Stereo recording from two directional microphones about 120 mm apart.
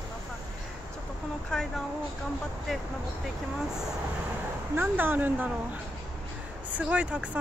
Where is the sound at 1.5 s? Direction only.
5° left (ahead or behind).